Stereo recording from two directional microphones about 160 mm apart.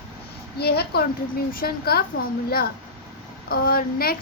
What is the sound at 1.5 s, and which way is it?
Speech, 70° left (ahead or behind).